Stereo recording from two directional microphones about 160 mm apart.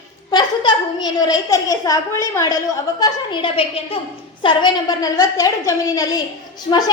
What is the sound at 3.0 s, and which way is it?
A woman's voice, 30° left (ahead or behind).